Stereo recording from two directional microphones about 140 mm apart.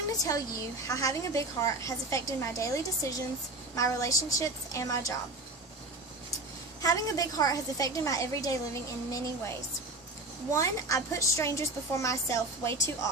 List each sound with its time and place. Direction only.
0.2 s a woman's voice: 25° left (ahead or behind)
6.8 s a woman's voice: 25° left (ahead or behind)
10.5 s a woman's voice: 20° left (ahead or behind)